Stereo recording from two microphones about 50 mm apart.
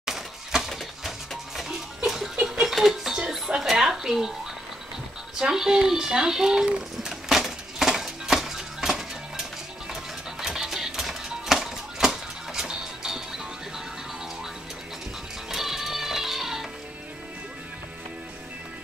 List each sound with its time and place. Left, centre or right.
0.0 s a sound: centre
2.6 s dishes: centre
5.4 s speech: centre
7.1 s music: centre
15.5 s music: centre